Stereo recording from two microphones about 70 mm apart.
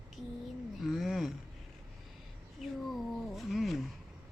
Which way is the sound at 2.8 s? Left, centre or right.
Centre.